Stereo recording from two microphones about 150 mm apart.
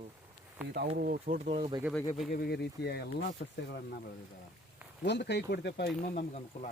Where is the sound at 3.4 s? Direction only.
75° left (ahead or behind).